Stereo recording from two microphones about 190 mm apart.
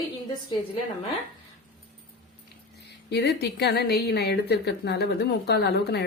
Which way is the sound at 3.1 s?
60° left (ahead or behind).